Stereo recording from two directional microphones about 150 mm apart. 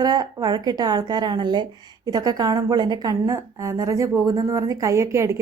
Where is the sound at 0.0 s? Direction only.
25° right (ahead or behind).